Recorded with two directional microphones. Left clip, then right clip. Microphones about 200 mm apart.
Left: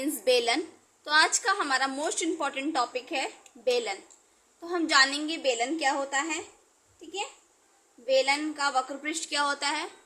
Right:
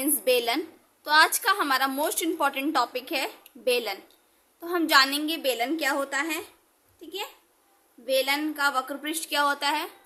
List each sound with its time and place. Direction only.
0.0 s a sound: 5° right (ahead or behind)
1.0 s speech: 10° right (ahead or behind)
8.0 s speech: 15° right (ahead or behind)